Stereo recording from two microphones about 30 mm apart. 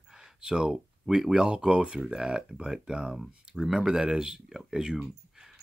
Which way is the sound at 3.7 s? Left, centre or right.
Right.